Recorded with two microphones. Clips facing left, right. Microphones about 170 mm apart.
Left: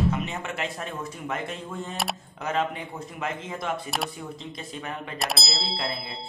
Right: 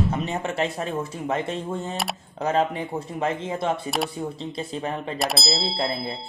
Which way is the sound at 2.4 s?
35° right (ahead or behind).